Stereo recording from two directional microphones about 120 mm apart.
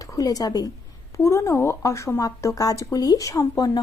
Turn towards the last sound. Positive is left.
turn(degrees=30)  # may be behind; listen again after turning